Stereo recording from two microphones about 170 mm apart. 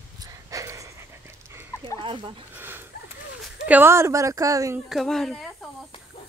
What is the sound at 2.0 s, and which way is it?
Speech, 30° right (ahead or behind).